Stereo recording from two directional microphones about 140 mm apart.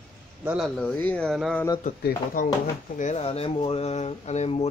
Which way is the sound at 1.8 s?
80° left.